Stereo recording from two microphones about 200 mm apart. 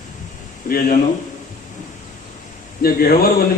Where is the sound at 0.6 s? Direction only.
45° left (ahead or behind).